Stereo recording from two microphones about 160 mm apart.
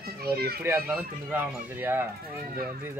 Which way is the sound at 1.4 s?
15° right (ahead or behind).